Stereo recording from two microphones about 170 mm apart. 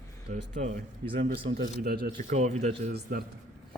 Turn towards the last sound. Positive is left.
turn(degrees=-60)  # may be behind; listen again after turning